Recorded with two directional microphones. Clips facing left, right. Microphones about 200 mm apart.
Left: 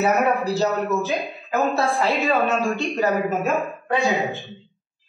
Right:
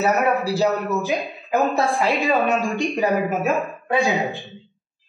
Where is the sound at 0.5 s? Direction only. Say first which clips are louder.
Right 1 dB; 10° right (ahead or behind).